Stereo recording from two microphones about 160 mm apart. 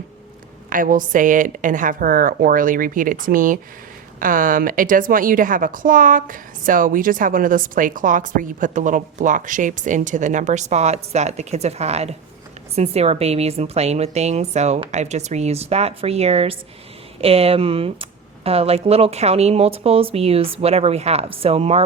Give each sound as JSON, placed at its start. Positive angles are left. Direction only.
{"t": 0.7, "sound": "a woman's voice", "side_deg": -60}